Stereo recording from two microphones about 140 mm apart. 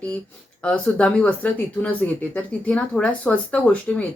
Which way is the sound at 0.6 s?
5° left (ahead or behind).